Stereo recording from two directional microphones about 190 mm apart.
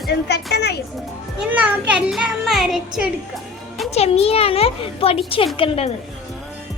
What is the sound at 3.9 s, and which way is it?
A child's voice, 35° left (ahead or behind).